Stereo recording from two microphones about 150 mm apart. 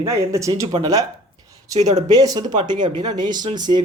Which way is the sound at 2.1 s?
25° right (ahead or behind).